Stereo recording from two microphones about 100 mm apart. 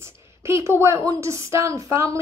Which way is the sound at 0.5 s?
25° right (ahead or behind).